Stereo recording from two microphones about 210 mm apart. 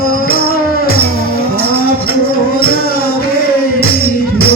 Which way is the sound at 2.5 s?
45° left (ahead or behind).